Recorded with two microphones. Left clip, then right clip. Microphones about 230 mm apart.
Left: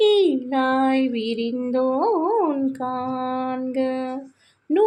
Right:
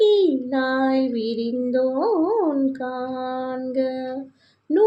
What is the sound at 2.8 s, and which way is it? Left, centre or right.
Speech, left.